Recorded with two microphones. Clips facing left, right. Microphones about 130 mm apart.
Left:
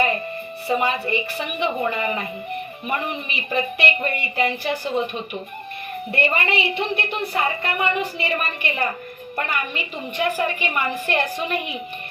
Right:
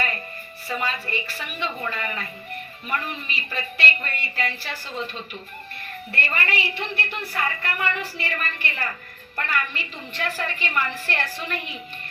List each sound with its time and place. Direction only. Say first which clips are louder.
0.7 s a woman's voice: left 7 dB; 20° left (ahead or behind)